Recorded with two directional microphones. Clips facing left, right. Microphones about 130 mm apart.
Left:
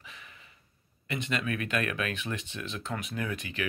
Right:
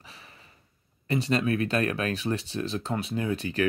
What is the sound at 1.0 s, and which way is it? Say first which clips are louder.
Speech: right 7 dB; 35° right (ahead or behind).